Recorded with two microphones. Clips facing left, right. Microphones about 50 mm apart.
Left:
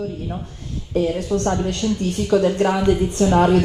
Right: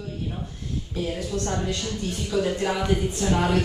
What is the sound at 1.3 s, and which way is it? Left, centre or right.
A man's voice, left.